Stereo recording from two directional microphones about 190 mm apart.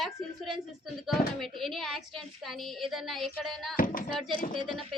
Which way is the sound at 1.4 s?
Centre (ahead or behind).